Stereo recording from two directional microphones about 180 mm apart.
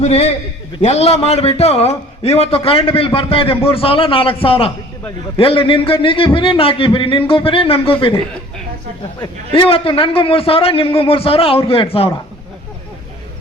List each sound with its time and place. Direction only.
0.0 s a man's voice: 35° left (ahead or behind)
9.2 s a man's voice: 30° left (ahead or behind)